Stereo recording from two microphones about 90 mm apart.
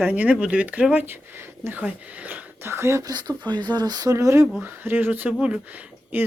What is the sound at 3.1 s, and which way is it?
Speech, 50° right (ahead or behind).